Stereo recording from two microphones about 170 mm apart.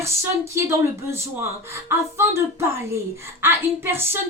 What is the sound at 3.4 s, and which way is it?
Speech, 10° right (ahead or behind).